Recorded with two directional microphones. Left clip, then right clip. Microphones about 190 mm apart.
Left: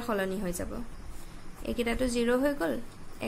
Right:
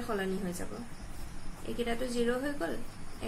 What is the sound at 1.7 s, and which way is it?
Speech, 60° left (ahead or behind).